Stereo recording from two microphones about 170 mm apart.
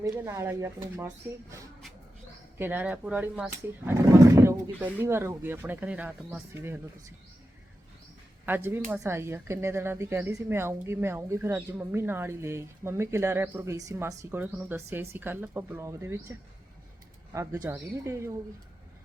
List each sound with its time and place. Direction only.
0.0 s speech: 20° right (ahead or behind)
8.4 s speech: 10° right (ahead or behind)
17.3 s speech: 15° right (ahead or behind)